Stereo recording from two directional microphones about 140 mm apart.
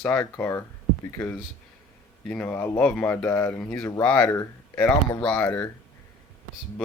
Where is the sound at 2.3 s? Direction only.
10° left (ahead or behind).